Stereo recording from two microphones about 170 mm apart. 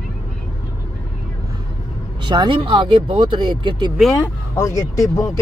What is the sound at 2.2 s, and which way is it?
Speech, 25° right (ahead or behind).